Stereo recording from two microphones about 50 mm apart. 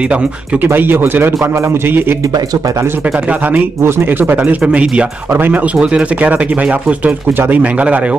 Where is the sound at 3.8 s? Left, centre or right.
Right.